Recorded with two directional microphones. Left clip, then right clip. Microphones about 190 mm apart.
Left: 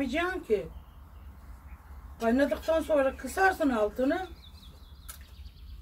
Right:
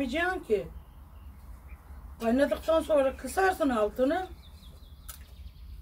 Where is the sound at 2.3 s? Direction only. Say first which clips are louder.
Right 2 dB; 20° right (ahead or behind).